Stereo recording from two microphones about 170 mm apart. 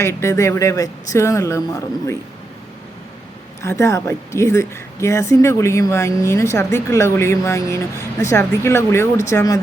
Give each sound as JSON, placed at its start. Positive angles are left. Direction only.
{"t": 0.0, "sound": "a woman's voice", "side_deg": 15}
{"t": 3.6, "sound": "a woman's voice", "side_deg": 15}